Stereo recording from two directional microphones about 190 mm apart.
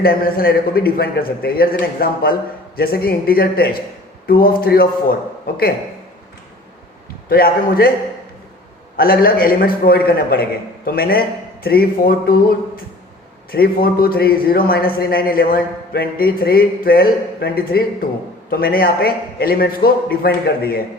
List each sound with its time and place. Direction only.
0.0 s a man's voice: 50° left (ahead or behind)
7.3 s a man's voice: 50° left (ahead or behind)
9.0 s a man's voice: 50° left (ahead or behind)